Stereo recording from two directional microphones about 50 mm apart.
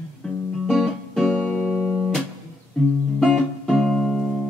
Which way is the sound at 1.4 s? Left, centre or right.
Left.